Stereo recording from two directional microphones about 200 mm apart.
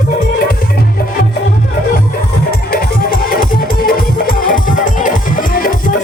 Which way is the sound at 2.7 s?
45° left (ahead or behind).